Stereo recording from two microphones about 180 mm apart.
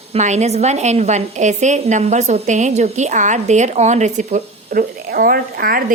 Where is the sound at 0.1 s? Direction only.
40° right (ahead or behind).